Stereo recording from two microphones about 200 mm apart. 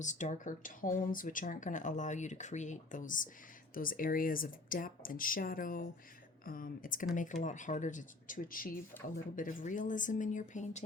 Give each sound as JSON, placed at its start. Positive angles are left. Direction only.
{"t": 0.0, "sound": "speech", "side_deg": 35}